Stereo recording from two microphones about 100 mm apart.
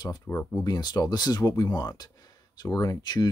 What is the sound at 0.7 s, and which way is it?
Speech, 45° left (ahead or behind).